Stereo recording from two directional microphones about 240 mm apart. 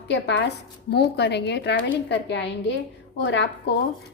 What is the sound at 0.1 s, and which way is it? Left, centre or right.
A woman's voice, left.